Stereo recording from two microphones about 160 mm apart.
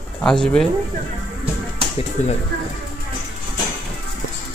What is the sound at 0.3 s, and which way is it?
Speech, 5° left (ahead or behind).